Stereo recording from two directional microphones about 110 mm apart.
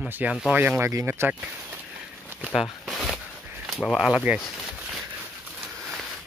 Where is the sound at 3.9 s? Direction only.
5° right (ahead or behind).